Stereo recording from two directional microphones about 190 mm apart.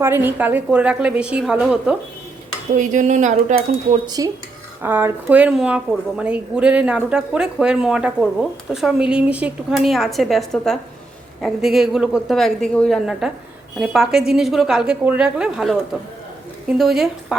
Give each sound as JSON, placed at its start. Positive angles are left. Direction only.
{"t": 0.0, "sound": "a woman's voice", "side_deg": -10}
{"t": 2.7, "sound": "speech", "side_deg": -40}
{"t": 4.0, "sound": "a woman's voice", "side_deg": -20}